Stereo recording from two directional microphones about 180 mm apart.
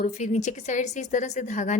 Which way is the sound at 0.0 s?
40° left (ahead or behind).